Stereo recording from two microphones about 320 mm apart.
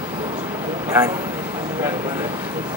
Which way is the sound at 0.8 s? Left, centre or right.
Centre.